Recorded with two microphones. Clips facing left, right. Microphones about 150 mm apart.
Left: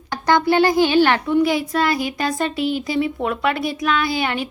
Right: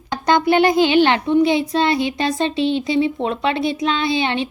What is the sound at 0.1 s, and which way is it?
A child's voice, 20° right (ahead or behind).